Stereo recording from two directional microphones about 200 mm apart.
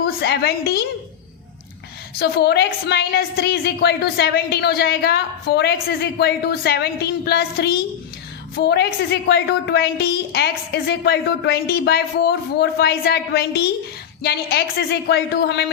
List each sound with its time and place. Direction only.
0.0 s a woman's voice: 55° left (ahead or behind)
2.1 s a woman's voice: 55° left (ahead or behind)